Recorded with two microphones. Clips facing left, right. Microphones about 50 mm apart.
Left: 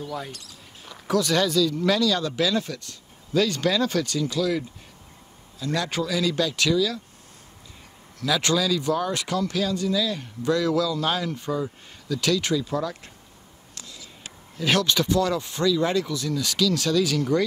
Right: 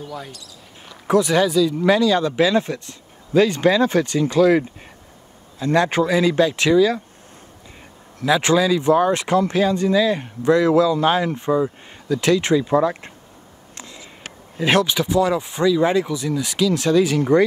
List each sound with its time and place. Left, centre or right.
0.0 s speech: centre
0.3 s speech: left
1.0 s speech: right
8.2 s speech: right
13.7 s a sound: right
14.6 s speech: right
14.9 s speech: centre